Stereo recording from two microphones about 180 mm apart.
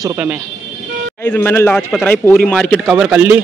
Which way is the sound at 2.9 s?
5° right (ahead or behind).